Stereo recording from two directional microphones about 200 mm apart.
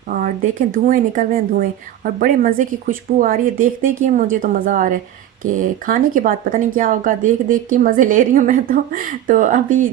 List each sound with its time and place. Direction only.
0.7 s speech: 40° right (ahead or behind)